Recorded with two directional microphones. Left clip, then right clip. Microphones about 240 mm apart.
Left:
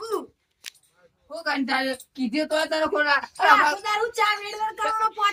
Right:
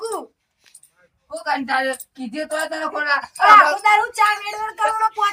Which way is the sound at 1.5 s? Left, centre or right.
Left.